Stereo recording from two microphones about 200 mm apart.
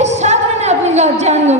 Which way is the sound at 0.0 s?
35° right (ahead or behind).